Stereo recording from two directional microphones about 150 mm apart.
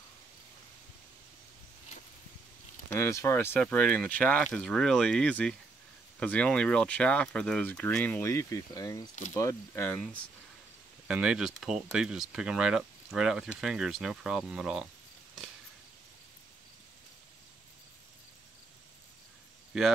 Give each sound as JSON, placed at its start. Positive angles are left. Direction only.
{"t": 2.9, "sound": "speech", "side_deg": 20}
{"t": 11.1, "sound": "speech", "side_deg": -5}
{"t": 19.7, "sound": "speech", "side_deg": 0}